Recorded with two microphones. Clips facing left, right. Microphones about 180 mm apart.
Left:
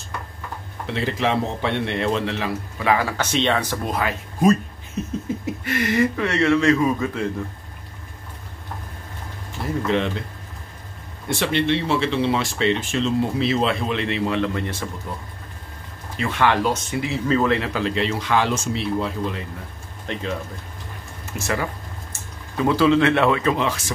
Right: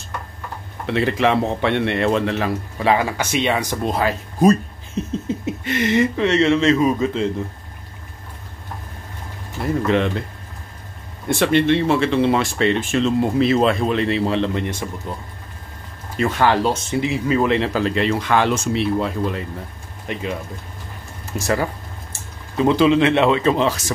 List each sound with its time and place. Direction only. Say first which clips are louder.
0.9 s speech: right 4 dB; 65° right (ahead or behind)
2.8 s speech: right 2 dB; 20° right (ahead or behind)
3.9 s speech: right 4 dB; 35° right (ahead or behind)
11.2 s speech: right 5 dB; 50° right (ahead or behind); by 14.9 s 15° right (ahead or behind)
16.2 s speech: right 3 dB; 40° right (ahead or behind)
17.1 s speech: even; 15° right (ahead or behind)
17.7 s speech: right 4 dB; 50° right (ahead or behind)
20.1 s speech: right 1 dB; 10° right (ahead or behind)
21.4 s speech: right 4 dB; 35° right (ahead or behind)
22.6 s speech: right 2 dB; 20° right (ahead or behind)